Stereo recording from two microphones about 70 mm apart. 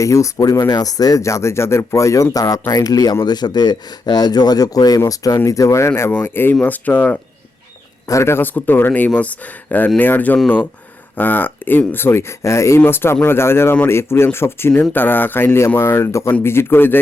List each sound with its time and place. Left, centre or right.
0.0 s speech: left
3.2 s speech: left
5.9 s a man's voice: left
8.0 s a man's voice: left
12.8 s speech: left